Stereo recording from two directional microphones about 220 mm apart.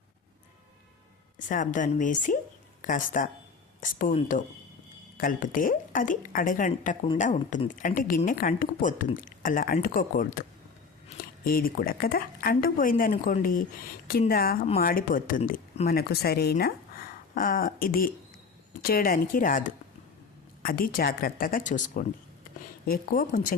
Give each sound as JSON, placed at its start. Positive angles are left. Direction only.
{"t": 1.5, "sound": "a woman's voice", "side_deg": 35}